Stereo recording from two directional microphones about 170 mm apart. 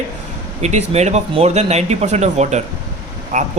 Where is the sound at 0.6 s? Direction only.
40° right (ahead or behind).